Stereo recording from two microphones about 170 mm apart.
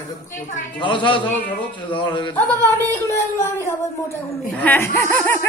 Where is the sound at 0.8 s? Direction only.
30° left (ahead or behind).